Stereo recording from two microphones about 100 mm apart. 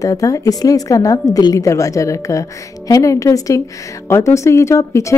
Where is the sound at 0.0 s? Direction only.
35° left (ahead or behind).